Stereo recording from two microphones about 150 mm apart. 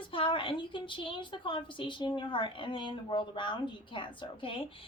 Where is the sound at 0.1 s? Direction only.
35° left (ahead or behind).